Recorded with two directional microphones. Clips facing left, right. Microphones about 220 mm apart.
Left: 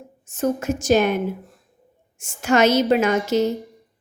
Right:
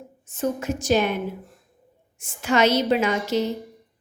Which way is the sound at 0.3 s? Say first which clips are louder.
Left 3 dB; 45° left (ahead or behind).